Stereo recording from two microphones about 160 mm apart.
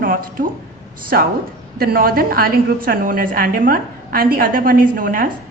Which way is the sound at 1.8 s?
70° right (ahead or behind).